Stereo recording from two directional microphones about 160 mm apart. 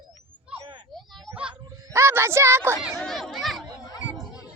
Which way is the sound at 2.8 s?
Centre (ahead or behind).